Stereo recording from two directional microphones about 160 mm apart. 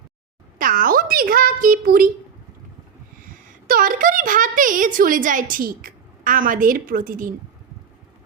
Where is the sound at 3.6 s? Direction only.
60° right (ahead or behind).